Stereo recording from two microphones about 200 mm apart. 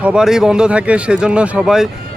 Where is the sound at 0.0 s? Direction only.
5° right (ahead or behind).